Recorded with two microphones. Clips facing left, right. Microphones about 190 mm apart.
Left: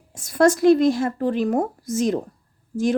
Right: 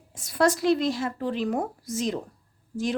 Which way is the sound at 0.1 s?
45° left (ahead or behind).